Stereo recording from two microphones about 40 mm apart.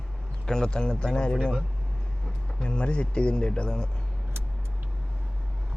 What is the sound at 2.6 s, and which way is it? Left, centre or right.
Speech, left.